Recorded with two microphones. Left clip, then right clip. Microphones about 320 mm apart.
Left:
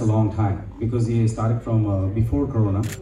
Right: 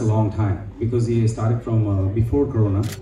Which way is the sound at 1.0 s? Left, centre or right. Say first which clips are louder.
Right 2 dB; left.